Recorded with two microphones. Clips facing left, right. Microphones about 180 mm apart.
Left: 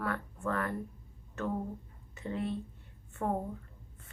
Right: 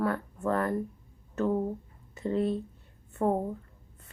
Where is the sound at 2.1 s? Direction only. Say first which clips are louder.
Right 7 dB; 35° right (ahead or behind).